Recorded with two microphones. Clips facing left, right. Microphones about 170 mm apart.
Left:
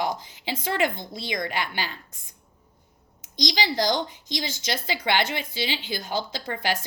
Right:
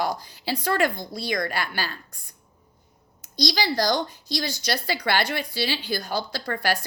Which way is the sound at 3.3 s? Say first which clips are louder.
Right 1 dB; 15° left (ahead or behind).